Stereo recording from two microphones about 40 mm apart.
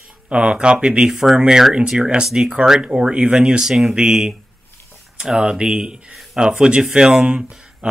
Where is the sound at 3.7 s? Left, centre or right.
Centre.